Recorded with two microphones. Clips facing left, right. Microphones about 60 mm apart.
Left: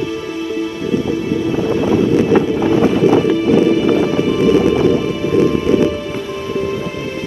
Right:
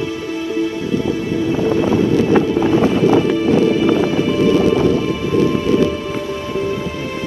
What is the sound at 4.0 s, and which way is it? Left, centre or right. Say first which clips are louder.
Music: left 1 dB; left.